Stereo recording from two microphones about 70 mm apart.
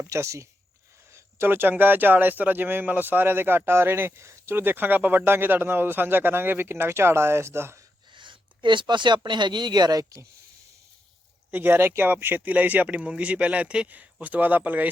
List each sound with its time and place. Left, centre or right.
0.1 s speech: right
1.1 s a sound: right
1.8 s speech: right
8.6 s speech: right
11.5 s speech: right